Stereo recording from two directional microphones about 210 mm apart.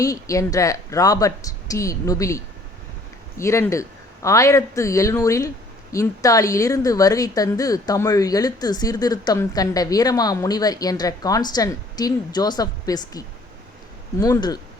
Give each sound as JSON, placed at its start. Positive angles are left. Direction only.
{"t": 0.0, "sound": "a woman's voice", "side_deg": 15}